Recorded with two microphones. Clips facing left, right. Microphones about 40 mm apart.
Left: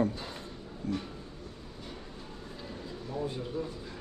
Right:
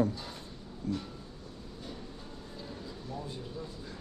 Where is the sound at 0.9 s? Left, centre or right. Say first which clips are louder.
Left 1 dB; left.